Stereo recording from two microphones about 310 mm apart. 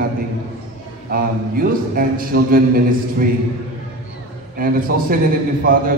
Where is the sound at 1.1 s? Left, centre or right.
Right.